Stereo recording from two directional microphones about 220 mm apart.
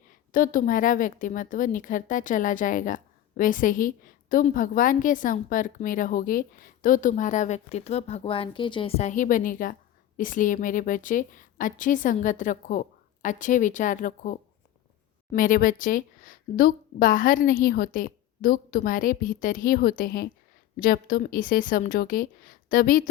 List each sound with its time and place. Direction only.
0.1 s a woman's voice: 40° left (ahead or behind)